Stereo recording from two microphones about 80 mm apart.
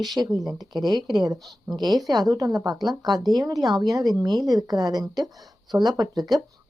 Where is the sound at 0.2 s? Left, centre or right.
Right.